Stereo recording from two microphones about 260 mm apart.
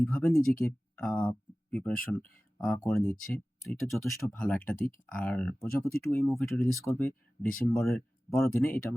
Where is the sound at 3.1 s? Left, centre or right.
Left.